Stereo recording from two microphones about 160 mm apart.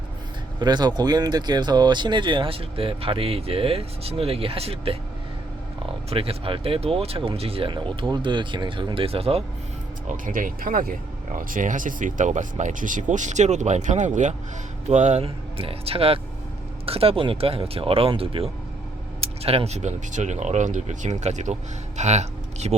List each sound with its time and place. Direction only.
0.6 s speech: 25° right (ahead or behind)
10.1 s speech: 55° right (ahead or behind)